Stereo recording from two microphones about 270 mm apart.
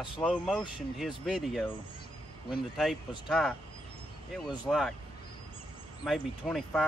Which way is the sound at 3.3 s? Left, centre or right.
Centre.